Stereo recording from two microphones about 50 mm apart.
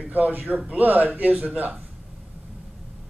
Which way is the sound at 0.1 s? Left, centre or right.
Right.